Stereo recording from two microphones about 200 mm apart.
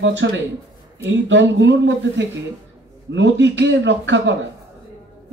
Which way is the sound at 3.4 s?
60° right (ahead or behind).